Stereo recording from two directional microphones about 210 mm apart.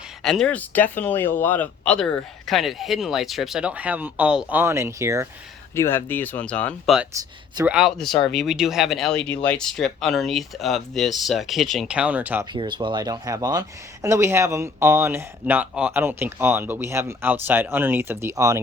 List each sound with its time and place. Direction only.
0.2 s speech: centre (ahead or behind); by 5.3 s 15° right (ahead or behind)
5.7 s speech: 10° left (ahead or behind)
7.2 s speech: 15° right (ahead or behind)
7.7 s speech: centre (ahead or behind)
12.5 s speech: 20° right (ahead or behind)